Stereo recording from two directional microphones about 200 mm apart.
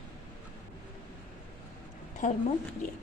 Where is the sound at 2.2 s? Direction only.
40° left (ahead or behind).